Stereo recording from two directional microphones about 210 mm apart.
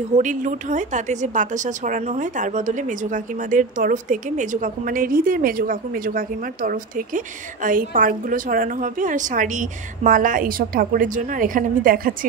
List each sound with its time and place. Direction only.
0.1 s a woman's voice: 35° right (ahead or behind)